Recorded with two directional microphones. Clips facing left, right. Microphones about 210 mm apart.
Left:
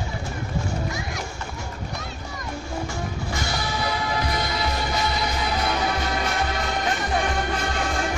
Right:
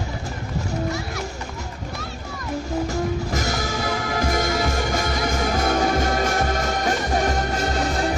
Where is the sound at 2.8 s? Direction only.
40° right (ahead or behind).